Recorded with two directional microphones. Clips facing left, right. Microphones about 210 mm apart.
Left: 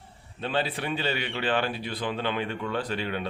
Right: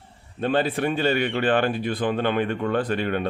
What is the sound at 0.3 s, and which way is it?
Speech, 50° right (ahead or behind).